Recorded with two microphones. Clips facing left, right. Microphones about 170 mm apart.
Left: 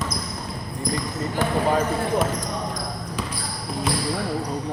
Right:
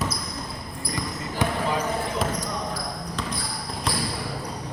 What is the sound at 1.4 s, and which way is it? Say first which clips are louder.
Basketball bounce: even; 15° right (ahead or behind).